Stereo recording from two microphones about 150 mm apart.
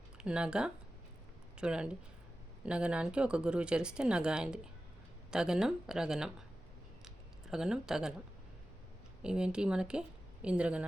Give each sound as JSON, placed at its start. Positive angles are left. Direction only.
{"t": 0.2, "sound": "speech", "side_deg": -5}
{"t": 7.0, "sound": "a sound", "side_deg": -5}
{"t": 9.2, "sound": "speech", "side_deg": -5}